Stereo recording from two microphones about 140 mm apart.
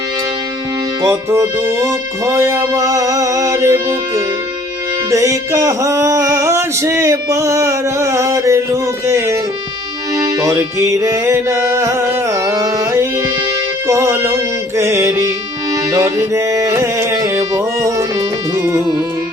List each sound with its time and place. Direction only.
1.0 s male singing: 20° right (ahead or behind)
10.4 s male singing: 20° right (ahead or behind)
13.8 s music: 20° right (ahead or behind)